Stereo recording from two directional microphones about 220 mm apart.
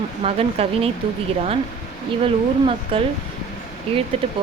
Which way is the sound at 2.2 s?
25° right (ahead or behind).